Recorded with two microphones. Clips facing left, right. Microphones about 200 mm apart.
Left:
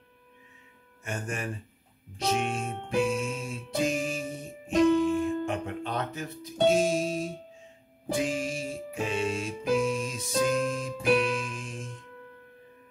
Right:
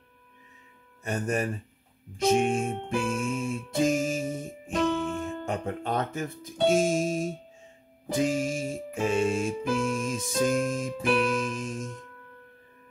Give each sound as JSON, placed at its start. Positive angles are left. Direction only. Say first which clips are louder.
{"t": 1.0, "sound": "speech", "louder": "right 6 dB", "side_deg": -40}
{"t": 2.1, "sound": "music", "louder": "right 6 dB", "side_deg": -50}